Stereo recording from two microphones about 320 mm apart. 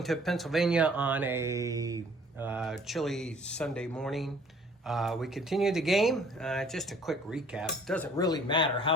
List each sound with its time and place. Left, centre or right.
0.0 s speech: centre